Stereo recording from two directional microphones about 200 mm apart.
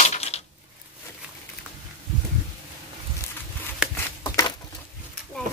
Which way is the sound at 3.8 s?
5° right (ahead or behind).